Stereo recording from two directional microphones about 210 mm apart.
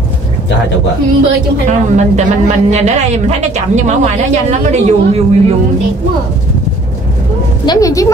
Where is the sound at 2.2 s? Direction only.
35° right (ahead or behind).